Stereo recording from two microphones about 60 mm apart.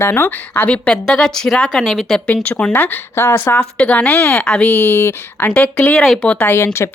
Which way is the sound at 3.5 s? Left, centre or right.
Centre.